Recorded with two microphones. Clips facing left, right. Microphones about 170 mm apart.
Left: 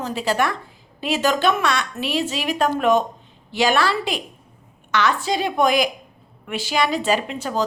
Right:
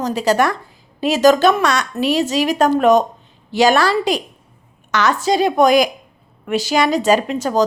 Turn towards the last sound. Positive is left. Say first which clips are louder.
# right 7 dB
turn(degrees=-40)  # may be behind; listen again after turning